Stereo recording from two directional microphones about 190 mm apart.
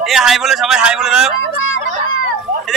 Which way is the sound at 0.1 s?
Centre (ahead or behind).